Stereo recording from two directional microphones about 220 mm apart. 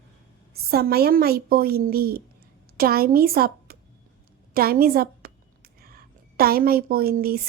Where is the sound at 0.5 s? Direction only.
45° right (ahead or behind).